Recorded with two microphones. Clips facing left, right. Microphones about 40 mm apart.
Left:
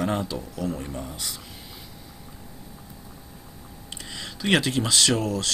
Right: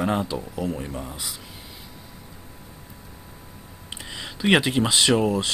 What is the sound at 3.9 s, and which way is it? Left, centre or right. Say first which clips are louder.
Speech: right 2 dB; centre.